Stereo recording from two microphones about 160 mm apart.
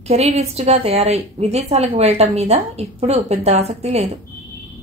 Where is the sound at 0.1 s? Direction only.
40° right (ahead or behind).